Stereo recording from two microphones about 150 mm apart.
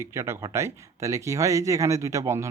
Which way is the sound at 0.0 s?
20° right (ahead or behind).